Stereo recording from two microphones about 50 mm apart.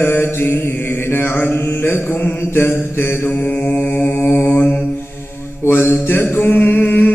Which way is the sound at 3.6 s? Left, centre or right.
Left.